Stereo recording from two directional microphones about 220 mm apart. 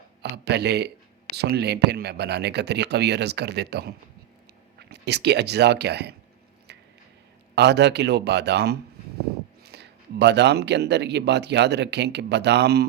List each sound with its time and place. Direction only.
0.2 s a sound: 50° right (ahead or behind)
1.4 s speech: 50° right (ahead or behind)
7.5 s speech: 50° right (ahead or behind)